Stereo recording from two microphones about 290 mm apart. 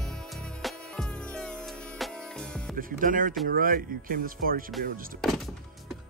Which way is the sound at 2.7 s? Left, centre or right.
Right.